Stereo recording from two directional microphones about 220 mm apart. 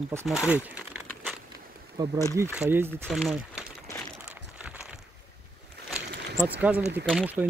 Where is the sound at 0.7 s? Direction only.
5° right (ahead or behind).